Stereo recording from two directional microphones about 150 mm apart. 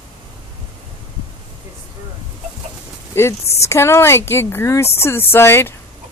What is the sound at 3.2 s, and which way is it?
Speech, 20° left (ahead or behind).